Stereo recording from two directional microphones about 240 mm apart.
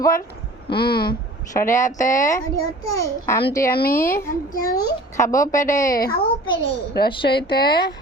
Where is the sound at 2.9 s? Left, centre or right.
Centre.